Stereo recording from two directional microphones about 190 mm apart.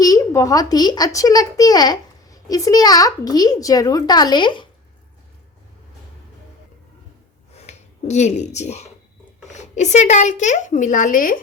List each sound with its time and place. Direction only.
0.0 s speech: 20° left (ahead or behind)
7.5 s a woman's voice: 35° left (ahead or behind)